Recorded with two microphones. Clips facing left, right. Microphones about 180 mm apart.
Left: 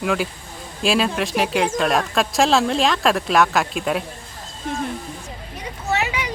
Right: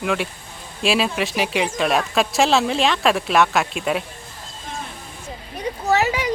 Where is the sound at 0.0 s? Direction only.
Centre (ahead or behind).